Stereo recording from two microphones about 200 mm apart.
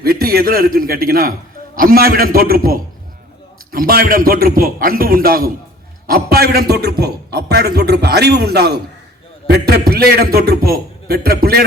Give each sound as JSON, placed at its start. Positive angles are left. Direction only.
{"t": 0.0, "sound": "a man's voice", "side_deg": -50}